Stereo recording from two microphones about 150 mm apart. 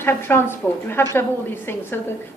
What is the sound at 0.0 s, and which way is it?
A woman's voice, 15° left (ahead or behind).